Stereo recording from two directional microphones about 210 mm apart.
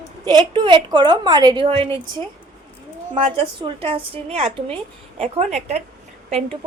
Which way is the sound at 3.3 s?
25° right (ahead or behind).